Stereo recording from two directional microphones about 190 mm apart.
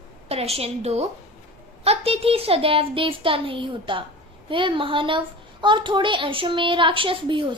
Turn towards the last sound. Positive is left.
turn(degrees=-25)  # may be behind; listen again after turning